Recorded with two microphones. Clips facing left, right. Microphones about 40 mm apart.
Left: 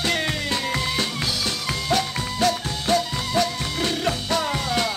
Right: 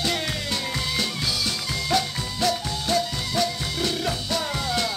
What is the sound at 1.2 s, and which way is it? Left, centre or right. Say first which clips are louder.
Music: left 1 dB; left.